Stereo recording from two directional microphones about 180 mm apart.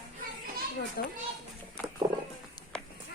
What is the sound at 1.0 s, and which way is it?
Speech, 60° left (ahead or behind).